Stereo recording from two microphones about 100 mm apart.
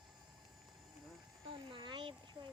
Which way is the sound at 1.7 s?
50° right (ahead or behind).